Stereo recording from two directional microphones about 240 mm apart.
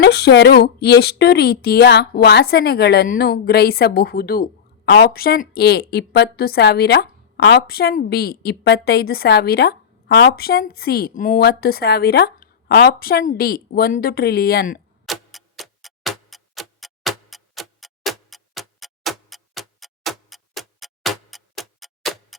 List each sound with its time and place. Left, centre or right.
0.0 s a woman's voice: left
15.0 s tick-tock: centre